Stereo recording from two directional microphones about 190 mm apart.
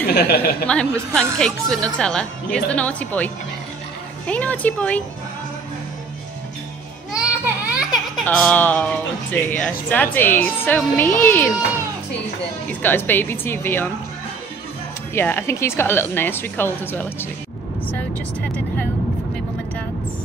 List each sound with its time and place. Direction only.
0.1 s speech: 55° left (ahead or behind)
0.7 s speech: 5° left (ahead or behind)
4.3 s a woman's voice: 10° left (ahead or behind)
7.1 s baby cry: 5° right (ahead or behind)
8.3 s a woman's voice: 10° left (ahead or behind)
12.8 s a woman's voice: 10° left (ahead or behind)
15.1 s a woman's voice: 10° left (ahead or behind)